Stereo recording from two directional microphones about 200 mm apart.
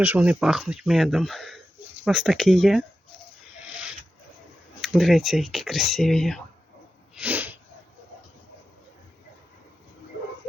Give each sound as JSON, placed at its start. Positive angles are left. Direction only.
{"t": 0.0, "sound": "speech", "side_deg": -10}
{"t": 4.8, "sound": "speech", "side_deg": 0}
{"t": 7.2, "sound": "sneeze", "side_deg": -10}